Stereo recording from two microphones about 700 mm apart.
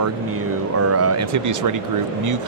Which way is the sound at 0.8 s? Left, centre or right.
Centre.